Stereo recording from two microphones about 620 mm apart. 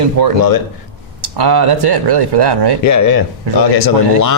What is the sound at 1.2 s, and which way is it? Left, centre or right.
Speech, right.